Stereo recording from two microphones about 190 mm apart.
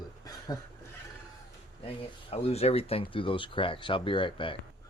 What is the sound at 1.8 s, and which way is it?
Speech, 30° left (ahead or behind).